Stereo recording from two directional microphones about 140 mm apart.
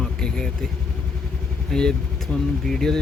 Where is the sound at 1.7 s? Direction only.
5° left (ahead or behind).